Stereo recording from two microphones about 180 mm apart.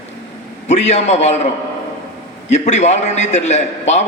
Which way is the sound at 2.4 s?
40° left (ahead or behind).